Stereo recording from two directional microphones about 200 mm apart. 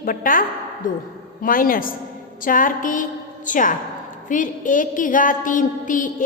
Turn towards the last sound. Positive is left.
turn(degrees=40)  # may be behind; listen again after turning